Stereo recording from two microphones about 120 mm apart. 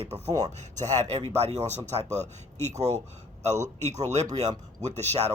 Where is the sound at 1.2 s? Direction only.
60° right (ahead or behind).